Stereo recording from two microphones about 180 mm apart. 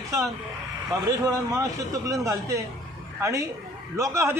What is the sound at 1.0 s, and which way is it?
A man's voice, 20° right (ahead or behind).